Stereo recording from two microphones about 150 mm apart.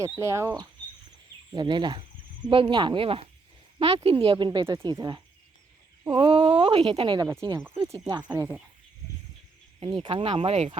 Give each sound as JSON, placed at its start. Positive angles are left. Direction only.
{"t": 0.0, "sound": "speech", "side_deg": -20}
{"t": 1.5, "sound": "speech", "side_deg": -30}
{"t": 9.8, "sound": "speech", "side_deg": -35}